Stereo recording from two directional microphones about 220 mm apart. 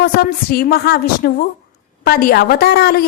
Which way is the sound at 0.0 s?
40° left (ahead or behind).